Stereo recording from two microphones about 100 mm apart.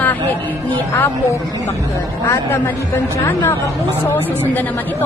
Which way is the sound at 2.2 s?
30° left (ahead or behind).